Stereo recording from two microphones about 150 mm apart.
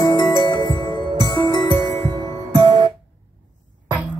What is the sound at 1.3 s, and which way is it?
Music, 30° left (ahead or behind).